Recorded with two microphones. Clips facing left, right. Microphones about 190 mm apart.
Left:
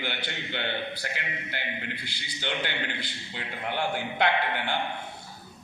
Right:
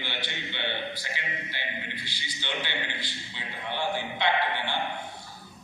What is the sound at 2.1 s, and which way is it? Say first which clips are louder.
A man's voice: left 2 dB; 55° left (ahead or behind).